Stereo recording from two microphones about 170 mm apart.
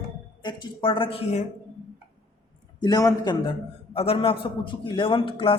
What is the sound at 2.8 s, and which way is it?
A man's voice, 20° left (ahead or behind).